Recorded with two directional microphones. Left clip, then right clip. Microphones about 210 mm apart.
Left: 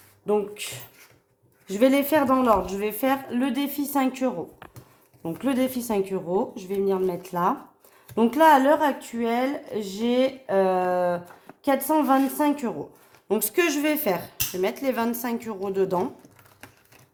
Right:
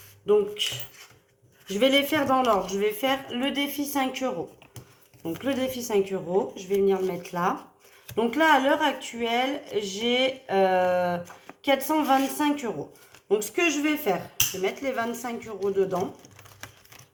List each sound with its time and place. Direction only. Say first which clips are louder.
1.8 s speech: left 2 dB; 45° left (ahead or behind)